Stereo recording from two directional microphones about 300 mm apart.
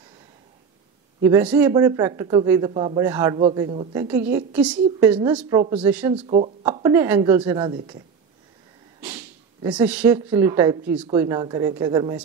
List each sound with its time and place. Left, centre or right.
1.2 s speech: centre
6.2 s speech: centre
9.0 s speech: centre